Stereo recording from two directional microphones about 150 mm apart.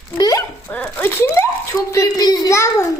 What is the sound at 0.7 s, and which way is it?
A woman's voice, 10° left (ahead or behind).